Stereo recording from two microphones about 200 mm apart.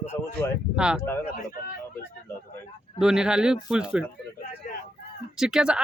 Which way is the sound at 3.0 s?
5° right (ahead or behind).